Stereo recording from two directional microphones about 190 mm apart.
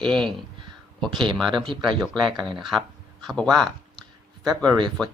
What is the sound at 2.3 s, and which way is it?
Speech, 25° right (ahead or behind).